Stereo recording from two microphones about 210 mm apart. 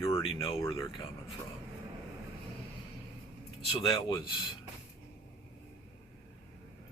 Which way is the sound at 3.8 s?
20° left (ahead or behind).